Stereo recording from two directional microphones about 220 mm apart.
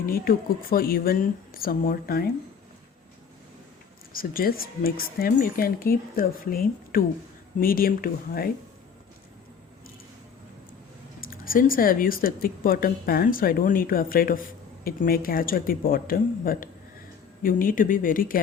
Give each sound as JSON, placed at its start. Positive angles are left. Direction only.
{"t": 0.0, "sound": "speech", "side_deg": 40}
{"t": 4.1, "sound": "speech", "side_deg": 40}
{"t": 11.2, "sound": "speech", "side_deg": 40}